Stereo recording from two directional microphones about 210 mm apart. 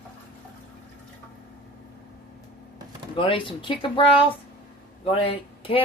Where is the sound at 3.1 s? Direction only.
25° left (ahead or behind).